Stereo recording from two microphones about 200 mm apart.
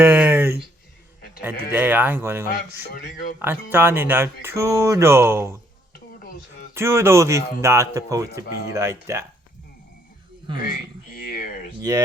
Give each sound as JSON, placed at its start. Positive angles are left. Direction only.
{"t": 0.0, "sound": "a sound", "side_deg": -10}
{"t": 1.4, "sound": "speech", "side_deg": -10}
{"t": 2.9, "sound": "speech", "side_deg": 50}
{"t": 3.4, "sound": "speech", "side_deg": -10}
{"t": 6.7, "sound": "speech", "side_deg": -10}
{"t": 10.6, "sound": "speech", "side_deg": 45}
{"t": 11.8, "sound": "speech", "side_deg": -15}